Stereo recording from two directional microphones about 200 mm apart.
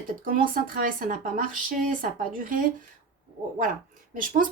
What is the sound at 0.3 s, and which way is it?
Speech, 45° right (ahead or behind).